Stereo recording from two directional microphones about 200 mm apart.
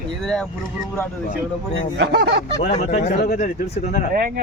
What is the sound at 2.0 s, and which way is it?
Speech, 55° right (ahead or behind).